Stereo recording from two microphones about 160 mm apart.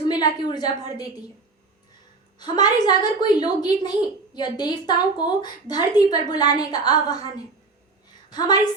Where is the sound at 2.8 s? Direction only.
25° left (ahead or behind).